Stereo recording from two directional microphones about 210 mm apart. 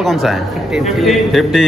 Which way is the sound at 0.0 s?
Centre (ahead or behind).